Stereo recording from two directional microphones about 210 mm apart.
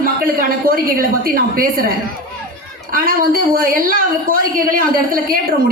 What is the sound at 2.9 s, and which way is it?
A woman's voice, 45° right (ahead or behind).